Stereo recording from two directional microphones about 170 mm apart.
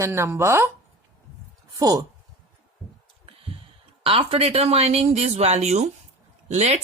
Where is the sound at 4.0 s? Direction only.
35° right (ahead or behind).